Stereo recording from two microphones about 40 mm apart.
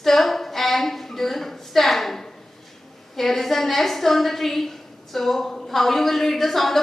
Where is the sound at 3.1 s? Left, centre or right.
Centre.